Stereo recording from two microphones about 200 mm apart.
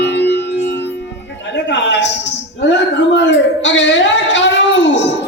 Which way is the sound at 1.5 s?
65° left (ahead or behind).